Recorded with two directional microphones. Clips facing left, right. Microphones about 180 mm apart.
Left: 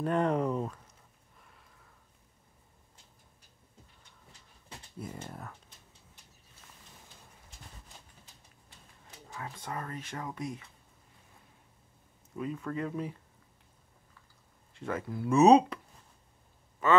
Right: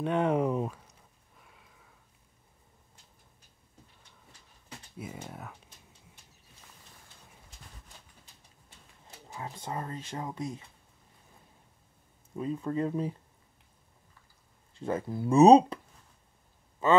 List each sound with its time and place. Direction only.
0.0 s speech: centre (ahead or behind)
1.4 s a sound: 5° right (ahead or behind)
4.9 s speech: 5° right (ahead or behind)
9.3 s speech: 25° right (ahead or behind)
12.4 s speech: 30° right (ahead or behind)
14.8 s speech: 30° right (ahead or behind)